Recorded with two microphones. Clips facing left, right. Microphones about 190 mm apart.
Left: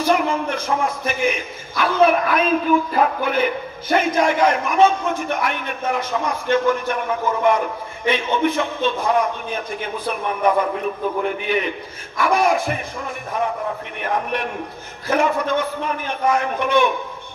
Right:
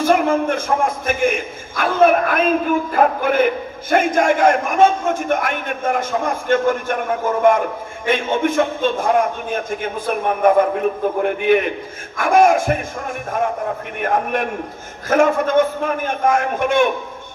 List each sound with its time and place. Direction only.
0.0 s a man's voice: 50° right (ahead or behind)